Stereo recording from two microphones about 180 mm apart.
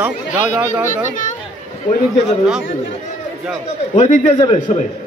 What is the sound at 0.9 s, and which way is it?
Speech, 45° left (ahead or behind).